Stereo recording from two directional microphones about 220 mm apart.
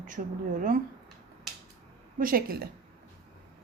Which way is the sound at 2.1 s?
40° right (ahead or behind).